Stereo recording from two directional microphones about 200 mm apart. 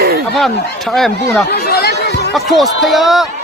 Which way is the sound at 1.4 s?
55° left (ahead or behind).